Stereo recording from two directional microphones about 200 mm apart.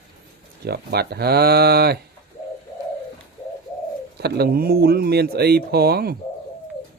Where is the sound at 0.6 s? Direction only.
55° right (ahead or behind).